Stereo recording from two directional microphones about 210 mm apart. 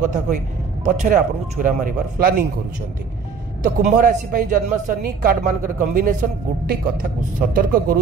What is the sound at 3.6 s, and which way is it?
A man's voice, 40° right (ahead or behind).